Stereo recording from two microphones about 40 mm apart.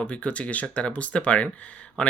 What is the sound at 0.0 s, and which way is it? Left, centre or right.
Speech, left.